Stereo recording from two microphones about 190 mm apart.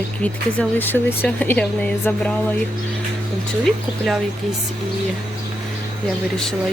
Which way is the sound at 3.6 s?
Centre (ahead or behind).